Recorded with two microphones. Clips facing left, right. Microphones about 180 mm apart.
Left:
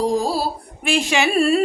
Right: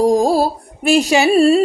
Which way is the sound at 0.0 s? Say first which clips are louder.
Right 7 dB; 45° right (ahead or behind).